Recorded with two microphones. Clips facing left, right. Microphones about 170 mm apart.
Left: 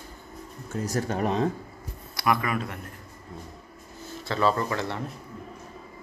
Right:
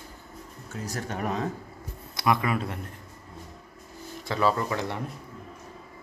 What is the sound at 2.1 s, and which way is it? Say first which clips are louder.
Speech: right 1 dB; 20° right (ahead or behind).